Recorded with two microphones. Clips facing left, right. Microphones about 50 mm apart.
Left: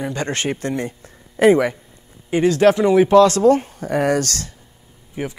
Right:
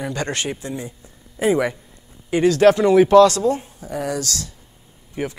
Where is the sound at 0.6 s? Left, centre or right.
Left.